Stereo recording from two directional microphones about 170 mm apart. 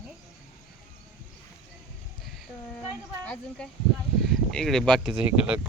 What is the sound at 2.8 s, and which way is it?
Speech, 10° left (ahead or behind).